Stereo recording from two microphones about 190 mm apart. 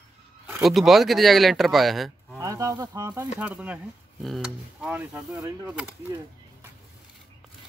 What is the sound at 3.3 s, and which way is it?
Speech, 5° right (ahead or behind).